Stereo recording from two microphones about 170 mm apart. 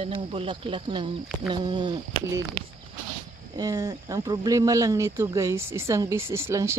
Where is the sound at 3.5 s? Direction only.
20° right (ahead or behind).